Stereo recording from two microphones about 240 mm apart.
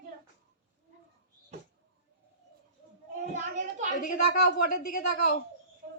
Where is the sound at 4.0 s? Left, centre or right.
Left.